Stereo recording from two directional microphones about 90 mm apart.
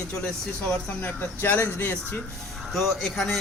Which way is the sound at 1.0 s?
15° left (ahead or behind).